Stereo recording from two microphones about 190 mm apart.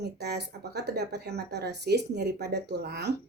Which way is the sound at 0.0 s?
60° right (ahead or behind).